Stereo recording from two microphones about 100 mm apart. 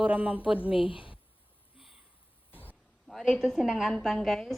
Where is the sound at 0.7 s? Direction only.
60° left (ahead or behind).